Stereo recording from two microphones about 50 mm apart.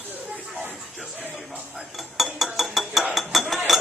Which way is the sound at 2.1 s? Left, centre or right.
Centre.